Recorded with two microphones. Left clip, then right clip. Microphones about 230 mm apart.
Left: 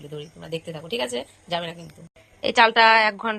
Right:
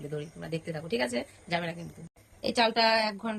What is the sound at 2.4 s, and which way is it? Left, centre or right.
Mantra, centre.